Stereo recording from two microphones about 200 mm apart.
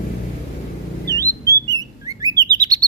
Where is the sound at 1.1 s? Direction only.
15° right (ahead or behind).